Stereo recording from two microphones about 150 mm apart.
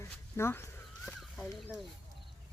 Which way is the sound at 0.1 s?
15° left (ahead or behind).